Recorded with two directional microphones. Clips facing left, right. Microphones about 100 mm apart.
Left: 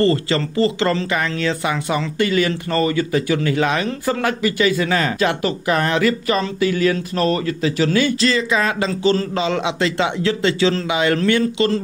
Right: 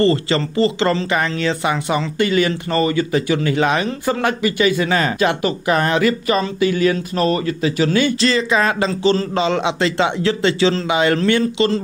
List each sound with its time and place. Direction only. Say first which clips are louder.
0.0 s speech: right 1 dB; 25° right (ahead or behind)